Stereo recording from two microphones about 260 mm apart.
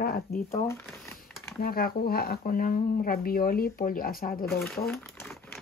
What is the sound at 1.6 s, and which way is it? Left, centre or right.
Speech, left.